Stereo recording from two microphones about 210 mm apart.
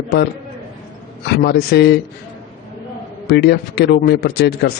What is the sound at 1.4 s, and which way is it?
Speech, 50° left (ahead or behind).